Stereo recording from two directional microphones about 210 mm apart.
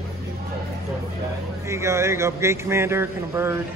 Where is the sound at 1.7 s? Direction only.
15° right (ahead or behind).